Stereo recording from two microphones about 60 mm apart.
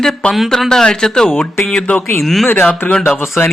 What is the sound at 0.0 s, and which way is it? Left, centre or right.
Speech, centre.